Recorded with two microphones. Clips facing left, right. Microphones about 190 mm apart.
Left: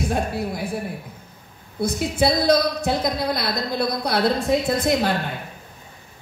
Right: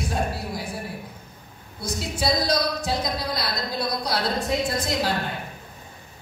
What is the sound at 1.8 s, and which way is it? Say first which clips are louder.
A woman's voice: left 7 dB; 55° left (ahead or behind).